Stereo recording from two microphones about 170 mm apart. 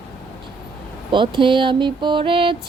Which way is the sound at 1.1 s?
30° right (ahead or behind).